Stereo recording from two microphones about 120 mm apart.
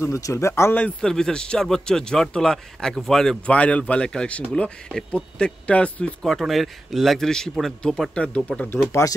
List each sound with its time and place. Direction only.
0.0 s speech: 25° left (ahead or behind)
0.8 s speech: 5° left (ahead or behind)